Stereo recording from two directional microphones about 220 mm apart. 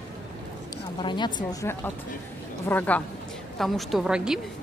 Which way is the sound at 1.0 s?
20° left (ahead or behind).